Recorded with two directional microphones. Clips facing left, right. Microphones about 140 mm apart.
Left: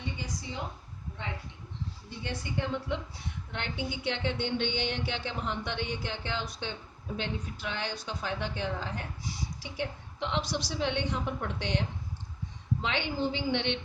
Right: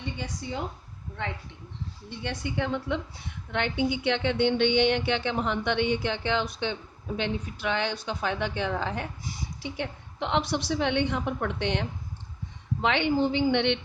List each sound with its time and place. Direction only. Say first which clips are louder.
2.2 s a woman's voice: right 4 dB; 65° right (ahead or behind)